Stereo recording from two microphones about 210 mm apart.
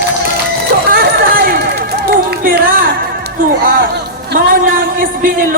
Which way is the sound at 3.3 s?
40° right (ahead or behind).